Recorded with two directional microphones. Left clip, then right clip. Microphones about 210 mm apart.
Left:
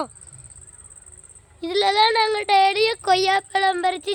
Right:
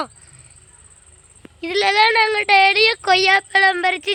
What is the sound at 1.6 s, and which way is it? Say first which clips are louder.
A woman's voice: right 3 dB; 10° right (ahead or behind).